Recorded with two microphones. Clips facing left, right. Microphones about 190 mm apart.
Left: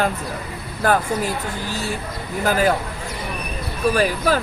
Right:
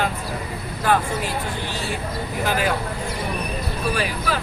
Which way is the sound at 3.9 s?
40° left (ahead or behind).